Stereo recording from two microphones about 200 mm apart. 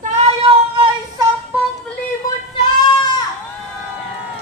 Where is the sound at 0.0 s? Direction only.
35° right (ahead or behind).